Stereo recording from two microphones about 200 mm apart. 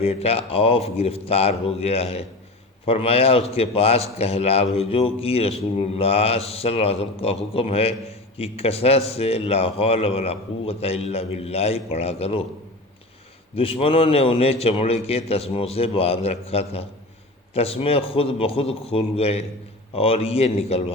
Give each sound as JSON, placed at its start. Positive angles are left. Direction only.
{"t": 0.0, "sound": "a man's voice", "side_deg": 30}
{"t": 13.6, "sound": "a man's voice", "side_deg": 30}